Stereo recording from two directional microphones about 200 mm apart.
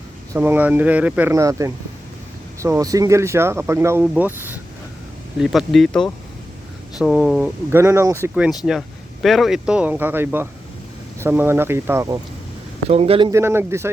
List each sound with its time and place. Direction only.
0.3 s speech: 10° right (ahead or behind)
7.7 s speech: 10° right (ahead or behind)
9.2 s speech: centre (ahead or behind)
12.9 s speech: 30° right (ahead or behind)
13.3 s speech: 10° right (ahead or behind)